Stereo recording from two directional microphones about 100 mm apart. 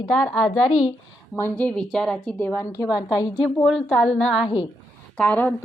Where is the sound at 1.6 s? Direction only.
10° left (ahead or behind); by 3.6 s 35° left (ahead or behind).